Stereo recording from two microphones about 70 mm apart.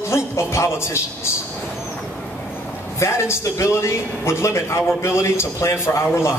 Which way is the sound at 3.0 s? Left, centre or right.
Left.